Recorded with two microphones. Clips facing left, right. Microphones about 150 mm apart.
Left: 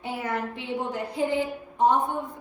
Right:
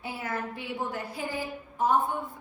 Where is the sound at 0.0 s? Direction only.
20° left (ahead or behind).